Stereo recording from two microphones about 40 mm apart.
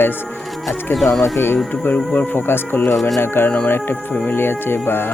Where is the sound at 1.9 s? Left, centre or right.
Left.